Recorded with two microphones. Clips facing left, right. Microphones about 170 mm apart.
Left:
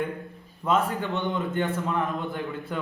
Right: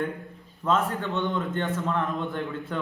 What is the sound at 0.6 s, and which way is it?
A man's voice, 10° left (ahead or behind).